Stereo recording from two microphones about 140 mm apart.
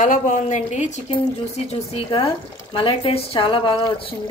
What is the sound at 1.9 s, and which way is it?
Speech, 40° left (ahead or behind).